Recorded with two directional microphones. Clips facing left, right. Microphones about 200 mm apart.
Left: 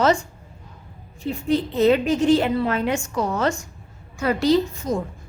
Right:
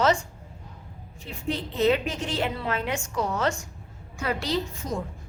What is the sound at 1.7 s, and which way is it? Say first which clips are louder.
A woman's voice: left 5 dB; 40° left (ahead or behind).